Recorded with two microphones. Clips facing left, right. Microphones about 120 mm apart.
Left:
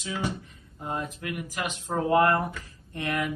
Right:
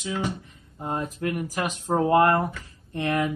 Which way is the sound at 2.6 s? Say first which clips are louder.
Right 5 dB; 30° right (ahead or behind).